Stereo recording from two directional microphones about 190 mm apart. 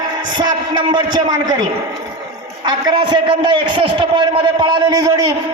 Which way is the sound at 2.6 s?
25° right (ahead or behind).